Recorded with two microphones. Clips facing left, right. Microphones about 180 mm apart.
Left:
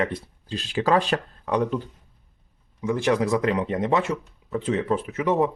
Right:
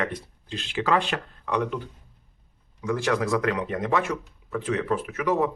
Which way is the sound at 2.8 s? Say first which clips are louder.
Left 3 dB; 20° left (ahead or behind).